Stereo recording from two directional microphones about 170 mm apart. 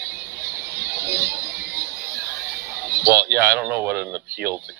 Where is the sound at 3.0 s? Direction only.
60° right (ahead or behind).